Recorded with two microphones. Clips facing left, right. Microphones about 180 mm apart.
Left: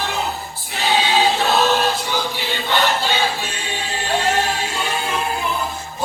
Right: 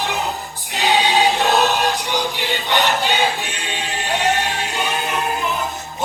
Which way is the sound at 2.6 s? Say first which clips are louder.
Even; 15° right (ahead or behind).